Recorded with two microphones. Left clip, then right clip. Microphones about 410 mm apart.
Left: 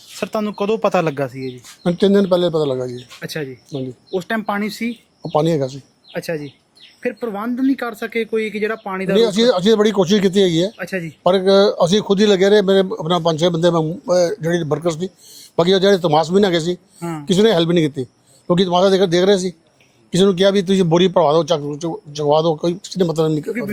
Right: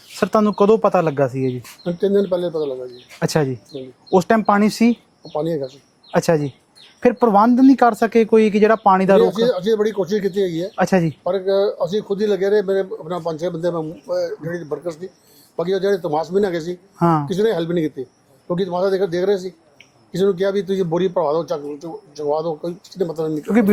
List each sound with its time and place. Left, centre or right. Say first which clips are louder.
0.2 s speech: right 6 dB; centre
0.8 s speech: right 1 dB; centre
1.8 s speech: left 3 dB; left
3.2 s speech: right 10 dB; right
4.4 s speech: right 6 dB; centre
4.6 s speech: right 6 dB; right
5.3 s speech: left 5 dB; left
6.1 s speech: right 7 dB; right
9.2 s speech: left 2 dB; left
10.8 s speech: right 8 dB; right
11.2 s speech: left 11 dB; left
17.0 s speech: right 11 dB; right
17.2 s a man's voice: left 5 dB; left